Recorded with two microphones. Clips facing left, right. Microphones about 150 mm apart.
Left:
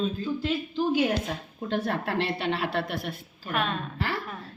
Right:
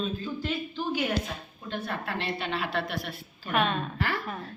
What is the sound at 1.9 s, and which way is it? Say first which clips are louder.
A woman's voice: left 5 dB; 70° left (ahead or behind).